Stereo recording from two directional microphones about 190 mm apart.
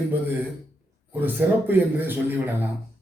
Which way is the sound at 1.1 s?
10° right (ahead or behind).